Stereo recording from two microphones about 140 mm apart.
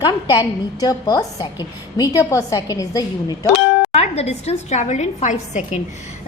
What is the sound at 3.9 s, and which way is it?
A woman's voice, 50° left (ahead or behind).